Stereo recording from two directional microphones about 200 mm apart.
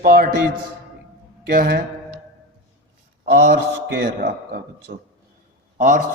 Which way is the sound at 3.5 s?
55° right (ahead or behind).